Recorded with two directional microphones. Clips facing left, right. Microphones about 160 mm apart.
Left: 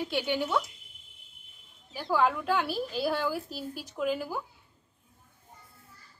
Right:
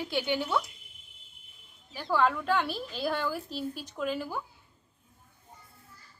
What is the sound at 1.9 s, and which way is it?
A woman's voice, 5° left (ahead or behind).